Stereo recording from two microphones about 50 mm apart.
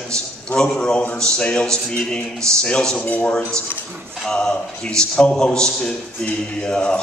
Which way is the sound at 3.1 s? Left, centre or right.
Left.